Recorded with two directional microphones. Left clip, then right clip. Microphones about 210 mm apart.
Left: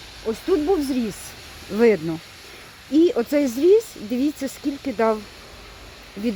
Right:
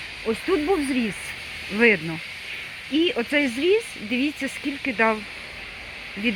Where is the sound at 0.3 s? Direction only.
35° left (ahead or behind).